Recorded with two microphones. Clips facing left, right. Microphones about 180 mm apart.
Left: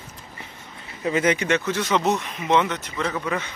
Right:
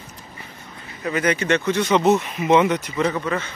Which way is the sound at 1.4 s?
5° left (ahead or behind).